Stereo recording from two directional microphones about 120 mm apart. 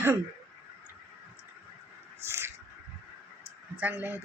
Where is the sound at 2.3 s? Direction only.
20° right (ahead or behind).